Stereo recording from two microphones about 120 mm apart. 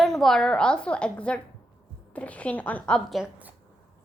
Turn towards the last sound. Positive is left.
turn(degrees=0)  # may be behind; listen again after turning